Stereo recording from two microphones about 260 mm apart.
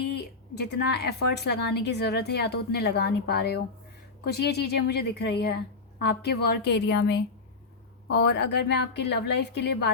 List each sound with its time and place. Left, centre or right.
0.1 s a woman's voice: left